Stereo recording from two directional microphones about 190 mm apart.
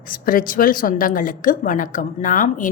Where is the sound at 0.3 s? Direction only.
45° left (ahead or behind).